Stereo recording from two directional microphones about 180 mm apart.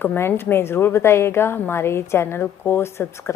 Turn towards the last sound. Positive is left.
turn(degrees=15)  # may be behind; listen again after turning